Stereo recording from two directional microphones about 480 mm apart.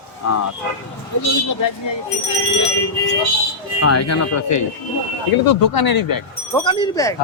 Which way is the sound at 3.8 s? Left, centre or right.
Left.